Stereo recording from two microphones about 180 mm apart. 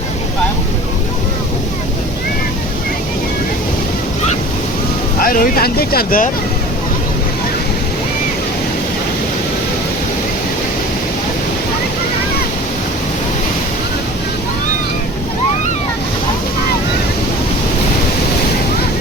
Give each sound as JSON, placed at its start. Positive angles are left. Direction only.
{"t": 5.2, "sound": "speech", "side_deg": 50}